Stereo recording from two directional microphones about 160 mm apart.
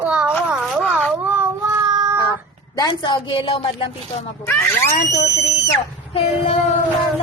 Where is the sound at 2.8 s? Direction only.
25° left (ahead or behind).